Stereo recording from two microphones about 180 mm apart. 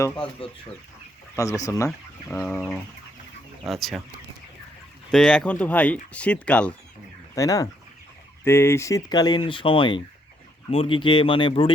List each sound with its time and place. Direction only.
0.2 s speech: 30° left (ahead or behind)
1.4 s speech: 20° left (ahead or behind)
3.7 s speech: centre (ahead or behind)
5.1 s speech: 5° left (ahead or behind)
7.3 s speech: 20° left (ahead or behind)